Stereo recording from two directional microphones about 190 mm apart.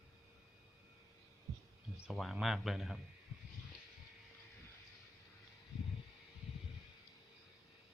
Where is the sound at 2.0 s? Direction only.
Centre (ahead or behind).